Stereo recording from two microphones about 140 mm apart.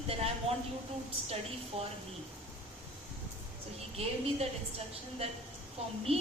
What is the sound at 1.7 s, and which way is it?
Speech, 50° right (ahead or behind).